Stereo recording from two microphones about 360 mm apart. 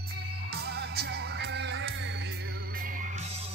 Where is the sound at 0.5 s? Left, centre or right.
Right.